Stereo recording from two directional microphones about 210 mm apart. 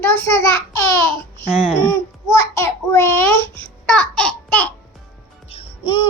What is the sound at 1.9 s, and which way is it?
A child's voice, 15° left (ahead or behind).